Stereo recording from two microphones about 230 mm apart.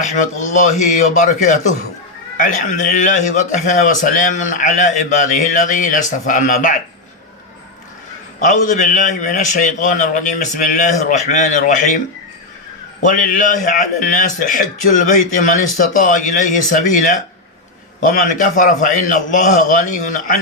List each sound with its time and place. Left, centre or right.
0.0 s a man's voice: left
8.6 s a man's voice: left
13.0 s a man's voice: left